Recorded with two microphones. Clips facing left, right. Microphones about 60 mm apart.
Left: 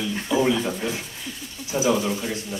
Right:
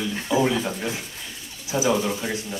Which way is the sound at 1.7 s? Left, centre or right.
Centre.